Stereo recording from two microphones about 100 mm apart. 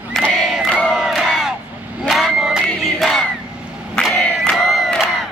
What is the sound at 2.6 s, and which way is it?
Crowd, 10° left (ahead or behind).